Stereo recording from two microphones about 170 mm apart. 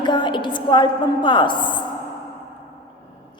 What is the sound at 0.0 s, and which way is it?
A woman's voice, 25° left (ahead or behind).